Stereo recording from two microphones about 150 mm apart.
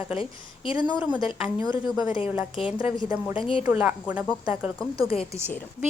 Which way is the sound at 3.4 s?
35° left (ahead or behind).